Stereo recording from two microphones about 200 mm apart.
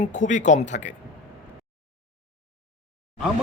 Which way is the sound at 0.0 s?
40° left (ahead or behind).